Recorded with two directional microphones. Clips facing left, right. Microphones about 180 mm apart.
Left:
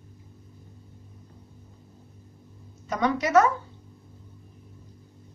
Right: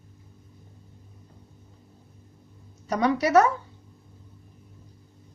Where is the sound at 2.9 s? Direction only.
30° right (ahead or behind).